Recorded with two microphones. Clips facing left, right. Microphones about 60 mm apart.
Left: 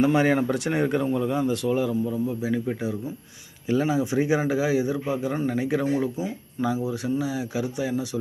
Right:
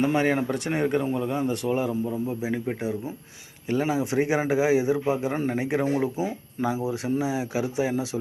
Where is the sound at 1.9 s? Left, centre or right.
Right.